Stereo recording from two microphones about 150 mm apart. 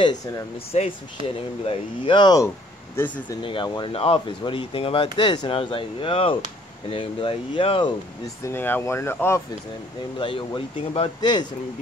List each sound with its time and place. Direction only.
0.0 s speech: 25° left (ahead or behind)
0.7 s speech: 50° left (ahead or behind)
1.7 s speech: 30° left (ahead or behind)
8.5 s speech: 15° left (ahead or behind)
10.1 s speech: 35° left (ahead or behind)